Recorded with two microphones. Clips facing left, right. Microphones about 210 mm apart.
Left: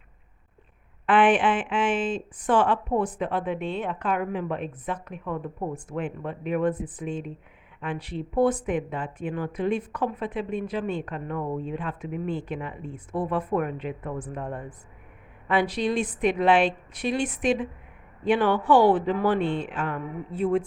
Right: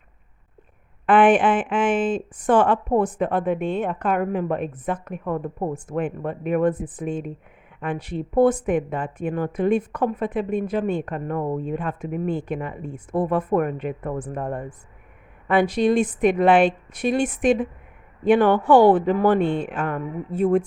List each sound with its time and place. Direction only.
1.0 s speech: 45° right (ahead or behind)